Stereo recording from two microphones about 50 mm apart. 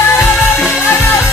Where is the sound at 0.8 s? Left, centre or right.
Left.